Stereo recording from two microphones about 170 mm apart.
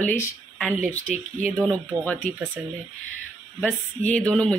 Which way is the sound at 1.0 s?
50° right (ahead or behind).